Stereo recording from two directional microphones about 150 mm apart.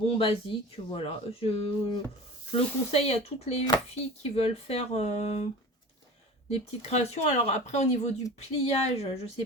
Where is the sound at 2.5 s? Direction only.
40° left (ahead or behind).